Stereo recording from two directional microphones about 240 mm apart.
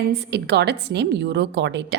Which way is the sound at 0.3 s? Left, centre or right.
Right.